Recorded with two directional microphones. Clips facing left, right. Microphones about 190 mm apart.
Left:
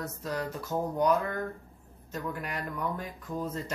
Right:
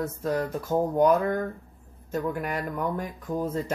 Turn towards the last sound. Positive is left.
turn(degrees=-50)  # may be behind; listen again after turning